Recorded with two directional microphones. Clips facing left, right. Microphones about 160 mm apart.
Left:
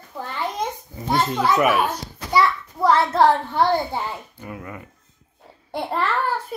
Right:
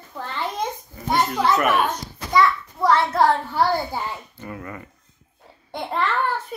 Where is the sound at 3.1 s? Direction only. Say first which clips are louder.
Left 2 dB; 25° left (ahead or behind).